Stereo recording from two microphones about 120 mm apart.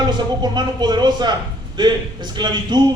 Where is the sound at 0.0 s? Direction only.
35° right (ahead or behind).